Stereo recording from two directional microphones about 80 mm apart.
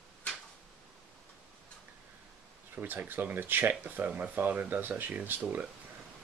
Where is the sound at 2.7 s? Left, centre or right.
Right.